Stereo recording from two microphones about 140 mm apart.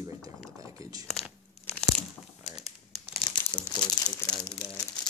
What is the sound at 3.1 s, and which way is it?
Crumpling, 30° left (ahead or behind).